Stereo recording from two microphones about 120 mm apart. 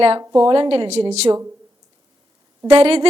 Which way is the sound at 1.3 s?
30° right (ahead or behind).